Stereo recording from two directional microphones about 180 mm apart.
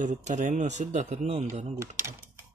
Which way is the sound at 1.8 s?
15° right (ahead or behind).